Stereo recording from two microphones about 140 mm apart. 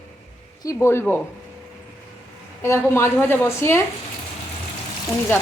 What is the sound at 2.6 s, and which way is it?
Speech, 20° left (ahead or behind).